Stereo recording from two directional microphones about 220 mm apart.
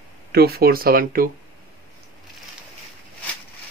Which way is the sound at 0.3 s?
45° right (ahead or behind).